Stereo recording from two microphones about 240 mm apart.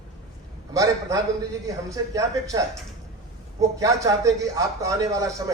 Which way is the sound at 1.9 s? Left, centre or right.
Centre.